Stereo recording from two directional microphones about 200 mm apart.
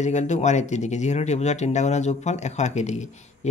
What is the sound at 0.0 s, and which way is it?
Speech, 35° left (ahead or behind).